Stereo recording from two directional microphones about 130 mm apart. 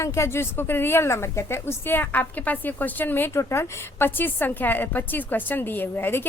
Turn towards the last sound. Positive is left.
turn(degrees=15)  # may be behind; listen again after turning